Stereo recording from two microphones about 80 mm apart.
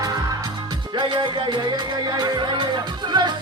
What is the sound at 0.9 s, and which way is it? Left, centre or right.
Music, right.